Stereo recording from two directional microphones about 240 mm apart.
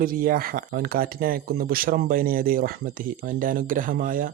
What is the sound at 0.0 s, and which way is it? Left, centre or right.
Speech, right.